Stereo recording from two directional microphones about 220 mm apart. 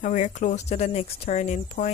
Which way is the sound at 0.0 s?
35° left (ahead or behind).